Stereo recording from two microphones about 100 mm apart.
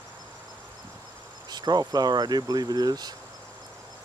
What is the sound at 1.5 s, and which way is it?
Speech, 45° right (ahead or behind).